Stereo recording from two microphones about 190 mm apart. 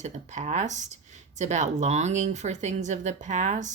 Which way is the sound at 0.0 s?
40° right (ahead or behind).